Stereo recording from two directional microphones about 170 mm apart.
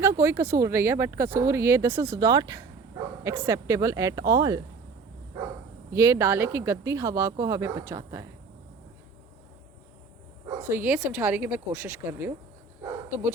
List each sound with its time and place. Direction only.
0.0 s speech: 15° right (ahead or behind)
5.9 s speech: 15° right (ahead or behind)
10.6 s speech: 10° right (ahead or behind)
12.8 s dog: 10° right (ahead or behind)